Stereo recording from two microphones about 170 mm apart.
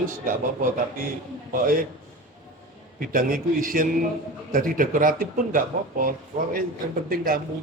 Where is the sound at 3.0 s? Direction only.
55° right (ahead or behind).